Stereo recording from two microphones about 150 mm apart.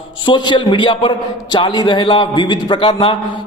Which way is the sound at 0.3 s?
30° left (ahead or behind).